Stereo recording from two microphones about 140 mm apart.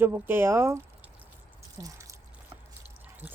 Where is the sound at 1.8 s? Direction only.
25° right (ahead or behind).